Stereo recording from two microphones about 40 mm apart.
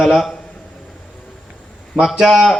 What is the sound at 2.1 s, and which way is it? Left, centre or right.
Speech, centre.